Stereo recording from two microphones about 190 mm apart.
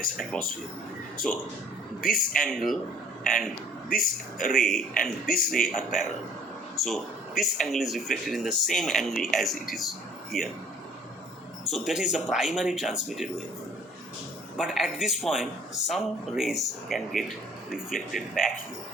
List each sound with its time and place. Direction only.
1.2 s speech: 5° left (ahead or behind)
2.0 s speech: 50° left (ahead or behind)
2.4 s speech: centre (ahead or behind)
11.6 s speech: centre (ahead or behind)
14.6 s speech: centre (ahead or behind)